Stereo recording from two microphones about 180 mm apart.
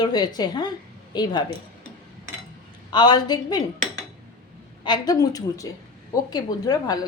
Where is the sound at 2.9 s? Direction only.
25° left (ahead or behind).